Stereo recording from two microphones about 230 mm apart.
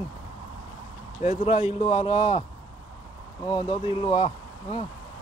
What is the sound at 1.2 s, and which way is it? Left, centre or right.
Speech, left.